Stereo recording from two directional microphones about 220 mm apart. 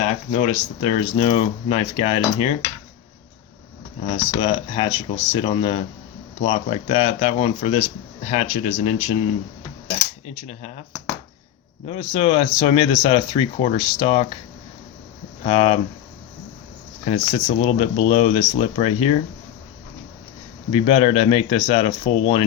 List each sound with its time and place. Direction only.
0.0 s speech: 35° left (ahead or behind)
4.0 s speech: 25° left (ahead or behind)
10.2 s speech: 30° left (ahead or behind)
11.9 s speech: 25° left (ahead or behind)
15.4 s speech: 30° left (ahead or behind)
17.1 s speech: 30° left (ahead or behind)
20.7 s speech: 25° left (ahead or behind)